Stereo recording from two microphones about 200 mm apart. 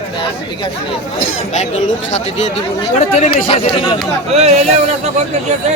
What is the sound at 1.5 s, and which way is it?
Speech, 35° left (ahead or behind).